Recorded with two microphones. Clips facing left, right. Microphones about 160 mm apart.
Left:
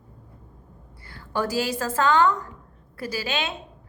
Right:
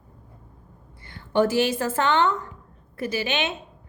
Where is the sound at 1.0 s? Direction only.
25° right (ahead or behind).